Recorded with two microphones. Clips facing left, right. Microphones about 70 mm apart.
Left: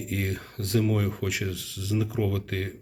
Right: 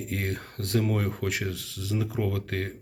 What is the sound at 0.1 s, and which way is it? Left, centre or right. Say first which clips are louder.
Speech: left 2 dB; right.